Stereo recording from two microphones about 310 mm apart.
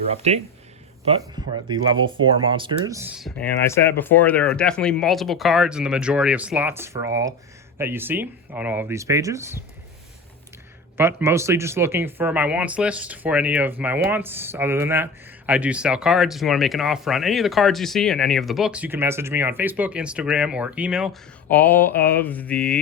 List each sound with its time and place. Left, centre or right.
0.2 s speech: right
10.9 s speech: centre